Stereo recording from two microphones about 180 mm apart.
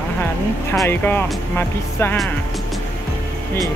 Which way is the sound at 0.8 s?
10° left (ahead or behind).